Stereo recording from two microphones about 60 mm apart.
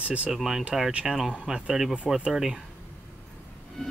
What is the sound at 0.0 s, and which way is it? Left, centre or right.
Speech, right.